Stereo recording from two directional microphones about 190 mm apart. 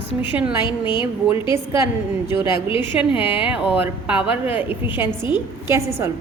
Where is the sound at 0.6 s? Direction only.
25° left (ahead or behind).